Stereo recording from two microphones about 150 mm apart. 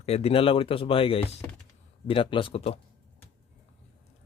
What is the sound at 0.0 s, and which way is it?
Speech, 45° left (ahead or behind).